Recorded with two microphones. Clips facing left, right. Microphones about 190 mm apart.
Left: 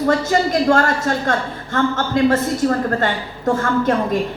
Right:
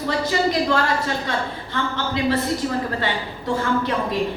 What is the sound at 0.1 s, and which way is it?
A woman's voice, 45° left (ahead or behind).